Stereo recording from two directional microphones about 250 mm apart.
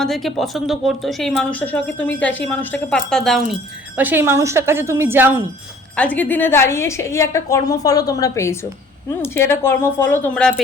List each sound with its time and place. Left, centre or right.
0.0 s a woman's voice: centre
6.0 s a woman's voice: centre